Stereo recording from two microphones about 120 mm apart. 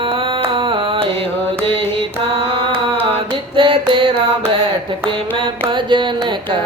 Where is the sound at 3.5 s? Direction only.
45° right (ahead or behind).